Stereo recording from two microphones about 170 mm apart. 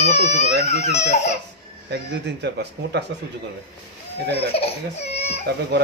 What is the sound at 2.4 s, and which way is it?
Speech, 80° right.